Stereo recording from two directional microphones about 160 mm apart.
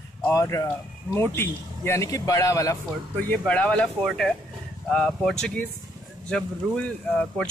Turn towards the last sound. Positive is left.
turn(degrees=5)  # may be behind; listen again after turning